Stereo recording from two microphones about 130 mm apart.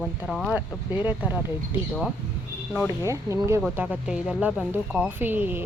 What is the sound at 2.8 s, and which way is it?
Speech, 20° right (ahead or behind).